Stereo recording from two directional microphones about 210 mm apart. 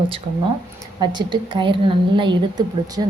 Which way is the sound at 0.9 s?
20° right (ahead or behind).